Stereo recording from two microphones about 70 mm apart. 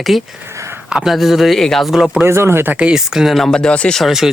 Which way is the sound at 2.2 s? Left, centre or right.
Right.